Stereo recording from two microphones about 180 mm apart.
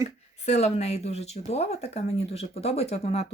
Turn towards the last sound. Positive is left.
turn(degrees=35)  # may be behind; listen again after turning